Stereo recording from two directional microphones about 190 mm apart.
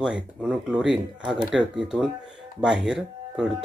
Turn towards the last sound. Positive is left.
turn(degrees=-5)  # may be behind; listen again after turning